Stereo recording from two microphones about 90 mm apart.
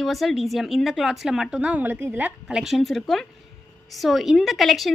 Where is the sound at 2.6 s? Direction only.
Centre (ahead or behind).